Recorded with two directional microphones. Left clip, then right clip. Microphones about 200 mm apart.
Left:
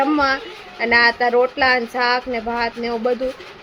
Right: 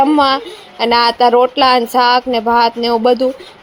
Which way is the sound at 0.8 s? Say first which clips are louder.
Right 4 dB; 25° right (ahead or behind).